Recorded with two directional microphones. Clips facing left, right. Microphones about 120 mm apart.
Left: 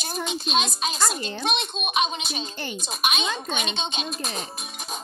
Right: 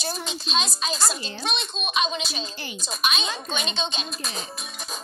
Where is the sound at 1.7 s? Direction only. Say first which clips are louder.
Left 1 dB; 15° left (ahead or behind).